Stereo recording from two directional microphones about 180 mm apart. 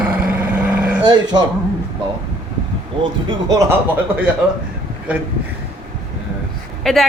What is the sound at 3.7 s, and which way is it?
Speech, 10° right (ahead or behind).